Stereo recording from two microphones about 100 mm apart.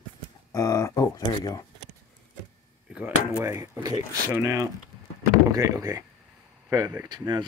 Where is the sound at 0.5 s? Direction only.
35° left (ahead or behind).